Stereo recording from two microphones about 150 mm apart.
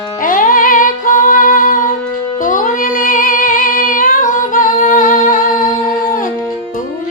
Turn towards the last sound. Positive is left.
turn(degrees=65)  # may be behind; listen again after turning